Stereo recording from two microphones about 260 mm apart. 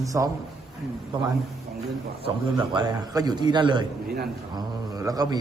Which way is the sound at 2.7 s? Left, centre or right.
Centre.